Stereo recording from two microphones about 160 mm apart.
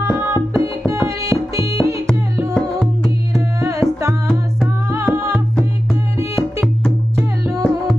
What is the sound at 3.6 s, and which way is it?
Music, 20° right (ahead or behind).